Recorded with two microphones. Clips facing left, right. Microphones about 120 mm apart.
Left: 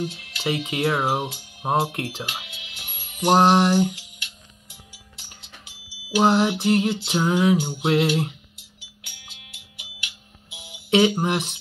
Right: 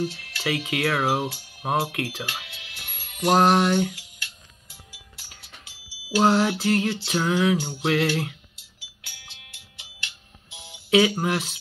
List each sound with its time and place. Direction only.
0.0 s speech: 20° left (ahead or behind)
3.3 s speech: 25° left (ahead or behind)
6.1 s a sound: 15° left (ahead or behind)
10.0 s music: 10° left (ahead or behind)
10.9 s speech: 20° left (ahead or behind)